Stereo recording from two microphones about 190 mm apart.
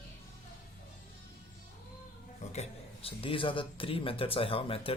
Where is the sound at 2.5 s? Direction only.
30° left (ahead or behind).